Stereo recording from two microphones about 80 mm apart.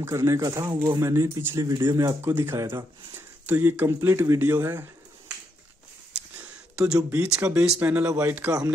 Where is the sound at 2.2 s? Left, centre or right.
Right.